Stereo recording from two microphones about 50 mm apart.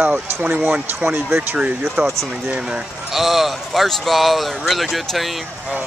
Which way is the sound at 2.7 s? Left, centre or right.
Centre.